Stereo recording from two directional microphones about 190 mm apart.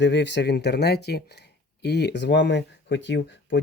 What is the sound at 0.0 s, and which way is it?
Speech, 65° left (ahead or behind).